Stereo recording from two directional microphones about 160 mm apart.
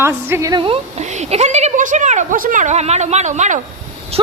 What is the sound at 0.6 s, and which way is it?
Speech, 35° right (ahead or behind).